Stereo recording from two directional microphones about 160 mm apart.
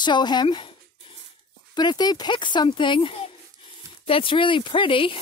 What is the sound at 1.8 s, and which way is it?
Speech, 25° left (ahead or behind).